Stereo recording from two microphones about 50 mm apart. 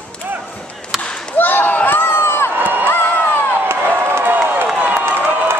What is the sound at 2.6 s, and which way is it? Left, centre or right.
Crowd, right.